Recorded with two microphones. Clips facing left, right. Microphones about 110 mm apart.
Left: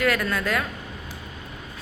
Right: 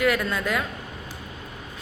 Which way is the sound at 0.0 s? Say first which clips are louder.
Even; 20° right (ahead or behind).